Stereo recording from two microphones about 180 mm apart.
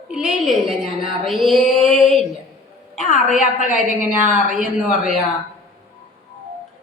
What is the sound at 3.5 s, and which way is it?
Speech, 45° left (ahead or behind).